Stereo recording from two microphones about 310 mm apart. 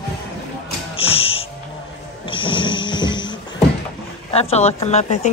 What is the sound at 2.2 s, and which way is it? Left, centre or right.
Snoring, centre.